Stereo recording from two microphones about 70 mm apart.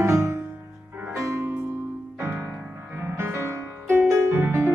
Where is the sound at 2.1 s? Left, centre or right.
Right.